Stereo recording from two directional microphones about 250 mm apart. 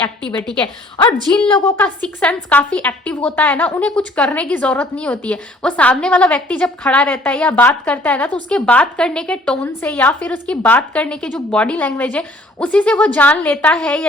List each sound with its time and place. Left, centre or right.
1.5 s a woman's voice: centre